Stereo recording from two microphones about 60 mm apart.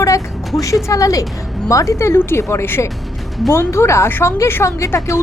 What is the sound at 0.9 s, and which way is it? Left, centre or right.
A woman's voice, left.